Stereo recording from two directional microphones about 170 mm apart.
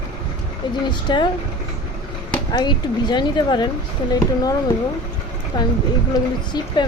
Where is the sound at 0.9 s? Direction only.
25° left (ahead or behind).